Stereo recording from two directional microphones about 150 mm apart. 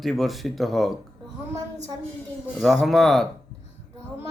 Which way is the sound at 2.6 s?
Centre (ahead or behind).